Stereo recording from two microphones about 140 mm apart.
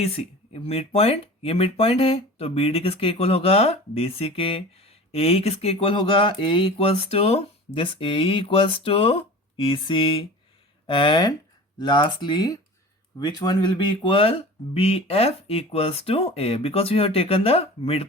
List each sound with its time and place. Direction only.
0.0 s speech: 45° left (ahead or behind)